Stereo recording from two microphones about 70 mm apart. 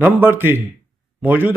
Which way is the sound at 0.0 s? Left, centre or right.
Right.